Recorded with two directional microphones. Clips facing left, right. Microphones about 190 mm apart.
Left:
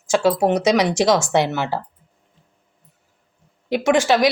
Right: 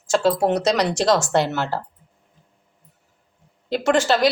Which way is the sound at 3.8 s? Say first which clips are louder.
Left 1 dB; centre (ahead or behind).